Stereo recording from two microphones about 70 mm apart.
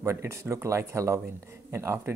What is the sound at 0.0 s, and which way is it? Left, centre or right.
Speech, right.